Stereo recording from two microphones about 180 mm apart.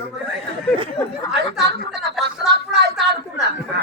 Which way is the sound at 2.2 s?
Centre (ahead or behind).